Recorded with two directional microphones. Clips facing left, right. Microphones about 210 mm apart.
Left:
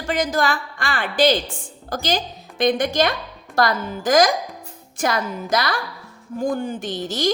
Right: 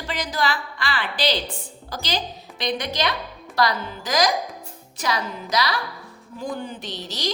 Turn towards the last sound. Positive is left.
turn(degrees=50)  # may be behind; listen again after turning